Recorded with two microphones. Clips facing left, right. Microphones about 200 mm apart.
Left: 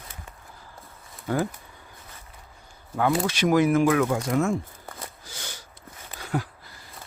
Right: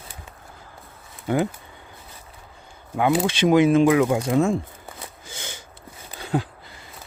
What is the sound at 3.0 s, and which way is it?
Speech, 20° right (ahead or behind).